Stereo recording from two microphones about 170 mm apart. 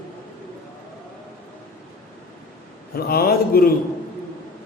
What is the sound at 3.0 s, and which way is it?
Speech, 65° left (ahead or behind).